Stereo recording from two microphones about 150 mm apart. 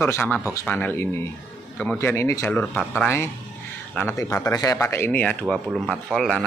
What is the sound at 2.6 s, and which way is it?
Speech, centre (ahead or behind).